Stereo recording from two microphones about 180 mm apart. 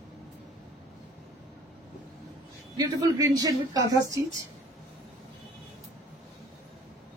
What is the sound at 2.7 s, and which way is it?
A woman's voice, 20° right (ahead or behind).